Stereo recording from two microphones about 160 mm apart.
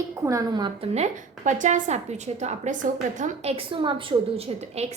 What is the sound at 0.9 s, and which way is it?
A woman's voice, 45° right (ahead or behind).